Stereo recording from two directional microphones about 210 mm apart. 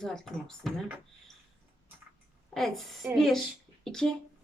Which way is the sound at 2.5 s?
Centre (ahead or behind).